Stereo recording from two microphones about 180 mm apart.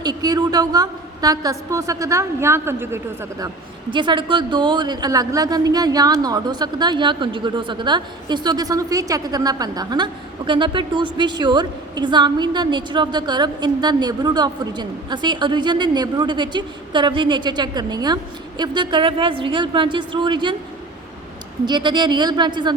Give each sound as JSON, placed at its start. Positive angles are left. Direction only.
{"t": 0.0, "sound": "a man's voice", "side_deg": -20}
{"t": 3.9, "sound": "a man's voice", "side_deg": -25}
{"t": 21.7, "sound": "a man's voice", "side_deg": -25}